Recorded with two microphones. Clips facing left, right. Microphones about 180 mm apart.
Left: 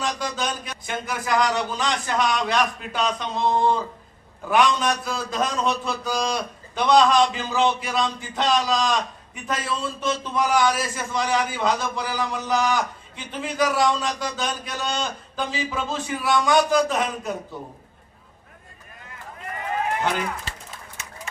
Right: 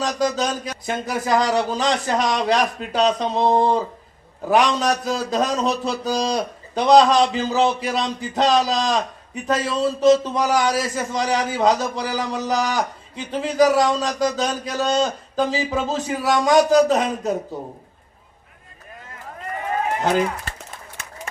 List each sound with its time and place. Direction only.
0.0 s a man's voice: 35° right (ahead or behind)
20.0 s speech: 40° right (ahead or behind)